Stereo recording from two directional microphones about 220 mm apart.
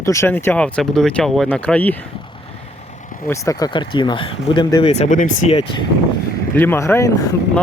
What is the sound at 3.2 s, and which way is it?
Speech, 15° left (ahead or behind).